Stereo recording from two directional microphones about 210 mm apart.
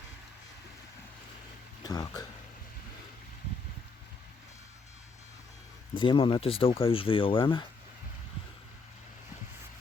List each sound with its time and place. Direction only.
1.8 s speech: 20° left (ahead or behind)
5.9 s speech: 25° left (ahead or behind)